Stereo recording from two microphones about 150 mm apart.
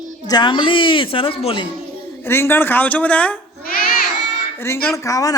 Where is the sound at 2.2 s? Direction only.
15° left (ahead or behind).